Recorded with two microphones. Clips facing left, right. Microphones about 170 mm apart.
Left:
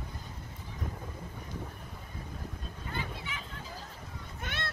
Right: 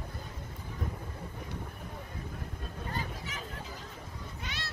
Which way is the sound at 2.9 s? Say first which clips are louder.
Left 1 dB; 40° right (ahead or behind).